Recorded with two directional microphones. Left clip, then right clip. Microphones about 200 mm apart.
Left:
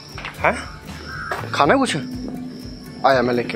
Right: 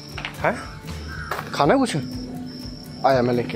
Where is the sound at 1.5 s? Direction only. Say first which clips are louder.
Left 3 dB; 15° right (ahead or behind).